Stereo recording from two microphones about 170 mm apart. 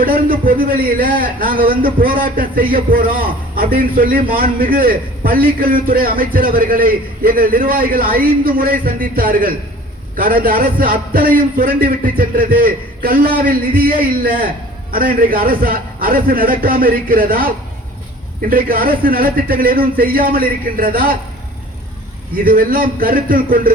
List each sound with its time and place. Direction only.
0.0 s a man's voice: 55° right (ahead or behind)
22.4 s a man's voice: 60° right (ahead or behind)